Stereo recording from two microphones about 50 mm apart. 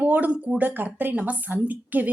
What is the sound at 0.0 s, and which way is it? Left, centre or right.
Speech, right.